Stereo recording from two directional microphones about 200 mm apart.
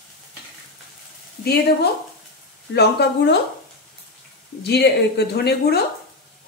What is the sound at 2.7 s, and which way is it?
Speech, 55° left (ahead or behind).